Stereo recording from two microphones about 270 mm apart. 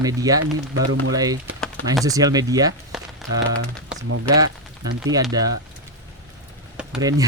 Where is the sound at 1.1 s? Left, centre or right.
Centre.